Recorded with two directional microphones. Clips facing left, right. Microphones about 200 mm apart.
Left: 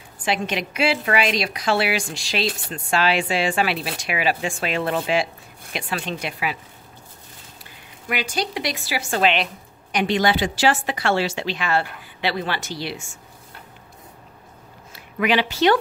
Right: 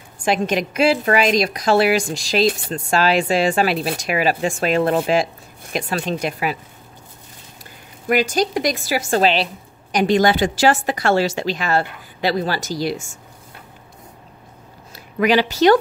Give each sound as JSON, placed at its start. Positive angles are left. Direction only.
{"t": 0.2, "sound": "a woman's voice", "side_deg": -45}
{"t": 8.1, "sound": "a woman's voice", "side_deg": -45}
{"t": 15.1, "sound": "speech", "side_deg": -40}